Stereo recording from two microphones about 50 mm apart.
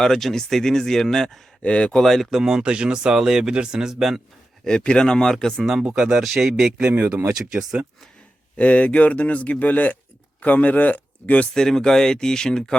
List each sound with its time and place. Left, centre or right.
0.0 s speech: centre
1.6 s speech: left
2.0 s speech: centre
2.3 s speech: centre
4.8 s speech: centre
6.0 s speech: centre
6.2 s speech: centre
6.9 s speech: right
7.3 s speech: centre
8.5 s speech: left
11.5 s speech: centre